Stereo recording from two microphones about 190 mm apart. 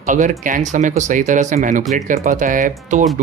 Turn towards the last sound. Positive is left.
turn(degrees=-40)  # may be behind; listen again after turning